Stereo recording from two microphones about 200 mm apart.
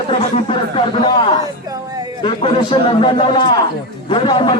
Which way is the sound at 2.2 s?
25° left (ahead or behind).